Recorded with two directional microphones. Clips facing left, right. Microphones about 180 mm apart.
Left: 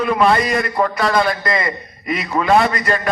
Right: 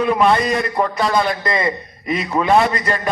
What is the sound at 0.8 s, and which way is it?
A man's voice, 20° right (ahead or behind).